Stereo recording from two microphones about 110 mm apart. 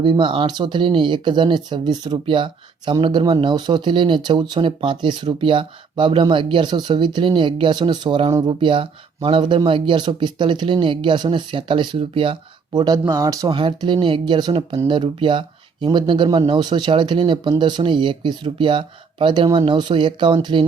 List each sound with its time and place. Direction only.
0.0 s speech: 45° right (ahead or behind)
13.5 s speech: 50° right (ahead or behind)